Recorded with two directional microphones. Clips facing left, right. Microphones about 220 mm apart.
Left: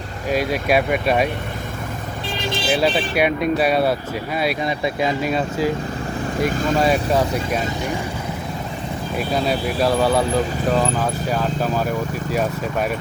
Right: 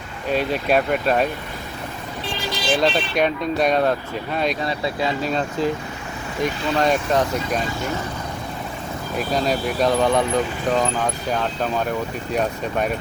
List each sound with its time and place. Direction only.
0.3 s speech: 10° left (ahead or behind)
2.6 s speech: 5° left (ahead or behind)
6.5 s speech: 45° left (ahead or behind)
6.7 s speech: 5° left (ahead or behind)
9.1 s speech: 5° left (ahead or behind)